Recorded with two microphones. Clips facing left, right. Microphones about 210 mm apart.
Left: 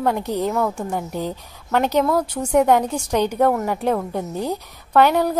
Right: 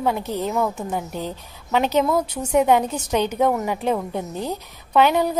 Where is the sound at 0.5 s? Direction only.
5° right (ahead or behind).